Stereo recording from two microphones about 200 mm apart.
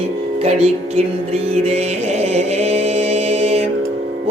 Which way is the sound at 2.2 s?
30° right (ahead or behind).